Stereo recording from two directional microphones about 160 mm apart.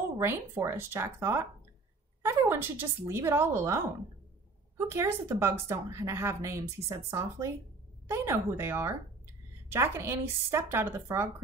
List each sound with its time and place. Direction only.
0.2 s a woman's voice: 15° right (ahead or behind)